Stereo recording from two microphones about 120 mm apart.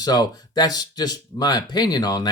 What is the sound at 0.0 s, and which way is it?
Speech, 35° left (ahead or behind).